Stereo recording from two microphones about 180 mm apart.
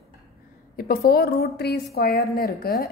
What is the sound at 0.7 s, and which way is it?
A woman's voice, 55° left (ahead or behind).